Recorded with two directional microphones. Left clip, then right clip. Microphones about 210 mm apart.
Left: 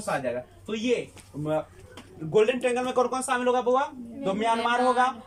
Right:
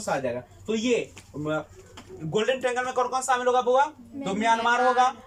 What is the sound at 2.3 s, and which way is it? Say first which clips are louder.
A man's voice: left 2 dB; 10° left (ahead or behind).